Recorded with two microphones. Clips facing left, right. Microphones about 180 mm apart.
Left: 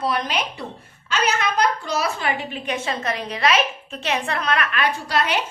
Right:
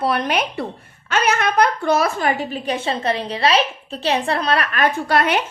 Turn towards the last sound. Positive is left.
turn(degrees=-55)  # may be behind; listen again after turning